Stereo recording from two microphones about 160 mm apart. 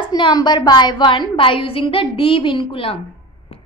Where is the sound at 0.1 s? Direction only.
25° left (ahead or behind).